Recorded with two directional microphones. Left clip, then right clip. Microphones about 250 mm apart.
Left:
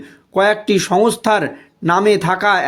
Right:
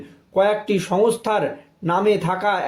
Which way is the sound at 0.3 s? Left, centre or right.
Left.